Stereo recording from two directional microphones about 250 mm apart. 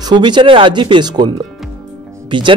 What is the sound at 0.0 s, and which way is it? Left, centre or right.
Speech, centre.